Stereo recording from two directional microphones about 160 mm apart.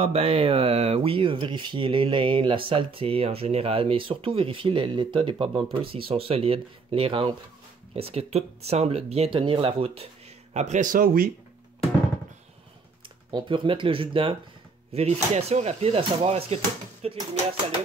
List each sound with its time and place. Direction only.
0.0 s speech: 40° right (ahead or behind)
10.5 s speech: 45° right (ahead or behind)
13.3 s speech: 30° right (ahead or behind)